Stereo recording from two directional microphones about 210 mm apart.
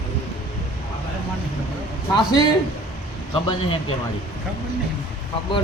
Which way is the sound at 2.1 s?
20° left (ahead or behind).